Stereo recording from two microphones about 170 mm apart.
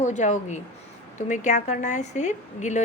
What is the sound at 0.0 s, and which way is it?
Speech, 45° left (ahead or behind).